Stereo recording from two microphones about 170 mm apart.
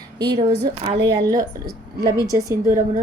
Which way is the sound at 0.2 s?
25° right (ahead or behind).